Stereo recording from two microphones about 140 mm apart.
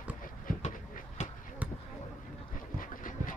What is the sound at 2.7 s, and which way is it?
Dog, 75° left (ahead or behind).